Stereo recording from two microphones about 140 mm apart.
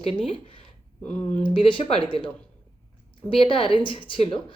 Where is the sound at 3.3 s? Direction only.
40° left (ahead or behind).